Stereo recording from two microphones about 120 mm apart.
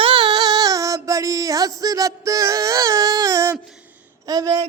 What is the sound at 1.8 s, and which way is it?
Music, 30° right (ahead or behind).